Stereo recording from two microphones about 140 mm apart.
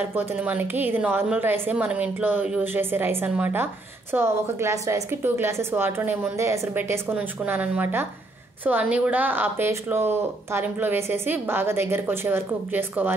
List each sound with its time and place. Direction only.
0.0 s speech: 15° right (ahead or behind)